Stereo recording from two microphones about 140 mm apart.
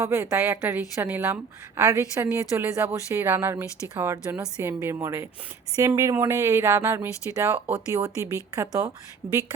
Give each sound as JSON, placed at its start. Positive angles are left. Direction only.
{"t": 0.0, "sound": "a woman's voice", "side_deg": -20}